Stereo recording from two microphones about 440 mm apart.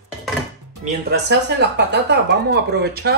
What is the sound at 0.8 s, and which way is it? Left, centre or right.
Speech, right.